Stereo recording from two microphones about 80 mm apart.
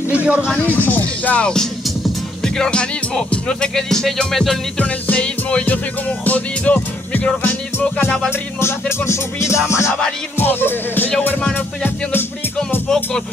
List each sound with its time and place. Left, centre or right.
0.1 s speech: centre
0.5 s music: left; by 4.6 s centre
4.7 s music: centre
8.3 s music: left